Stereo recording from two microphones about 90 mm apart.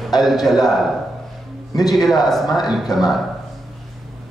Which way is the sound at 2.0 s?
Centre (ahead or behind).